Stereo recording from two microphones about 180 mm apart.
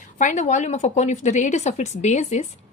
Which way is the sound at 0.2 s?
40° left (ahead or behind).